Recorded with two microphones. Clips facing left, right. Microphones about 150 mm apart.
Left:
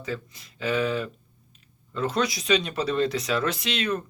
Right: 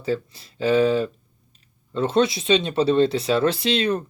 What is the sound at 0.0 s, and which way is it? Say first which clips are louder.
Speech: right 8 dB; 30° right (ahead or behind).